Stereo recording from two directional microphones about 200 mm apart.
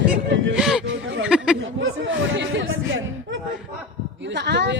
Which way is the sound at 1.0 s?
75° right (ahead or behind).